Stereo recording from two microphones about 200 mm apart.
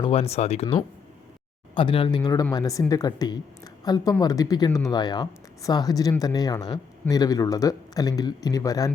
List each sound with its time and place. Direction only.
0.0 s speech: 30° left (ahead or behind)